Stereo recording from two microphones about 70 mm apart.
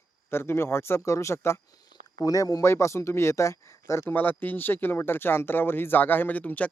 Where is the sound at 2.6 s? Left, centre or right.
Left.